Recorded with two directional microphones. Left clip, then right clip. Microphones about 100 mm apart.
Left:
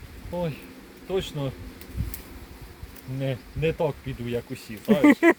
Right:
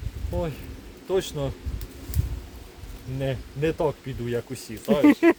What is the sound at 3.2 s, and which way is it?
Speech, 45° right (ahead or behind).